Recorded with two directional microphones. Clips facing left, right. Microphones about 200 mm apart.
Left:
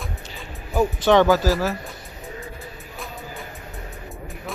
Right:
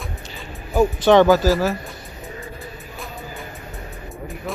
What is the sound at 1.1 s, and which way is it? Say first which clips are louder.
Speech: right 3 dB; 30° right (ahead or behind).